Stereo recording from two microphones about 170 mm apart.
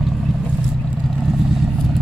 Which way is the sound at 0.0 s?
Centre (ahead or behind).